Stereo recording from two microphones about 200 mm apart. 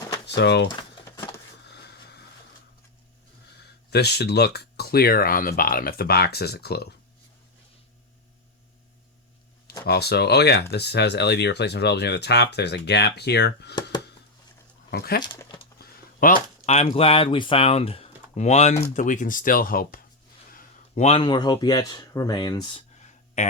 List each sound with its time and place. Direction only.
0.3 s speech: 60° left (ahead or behind)
3.8 s speech: 55° left (ahead or behind)
9.8 s speech: 55° left (ahead or behind)
14.8 s speech: 50° left (ahead or behind)
15.2 s a sound: 15° left (ahead or behind)
15.8 s speech: 45° left (ahead or behind); by 22.8 s 20° left (ahead or behind)